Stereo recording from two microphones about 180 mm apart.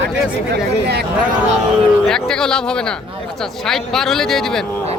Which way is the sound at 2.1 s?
5° left (ahead or behind).